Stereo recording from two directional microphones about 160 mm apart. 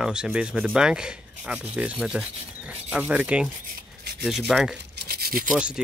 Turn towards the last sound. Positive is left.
turn(degrees=-5)  # may be behind; listen again after turning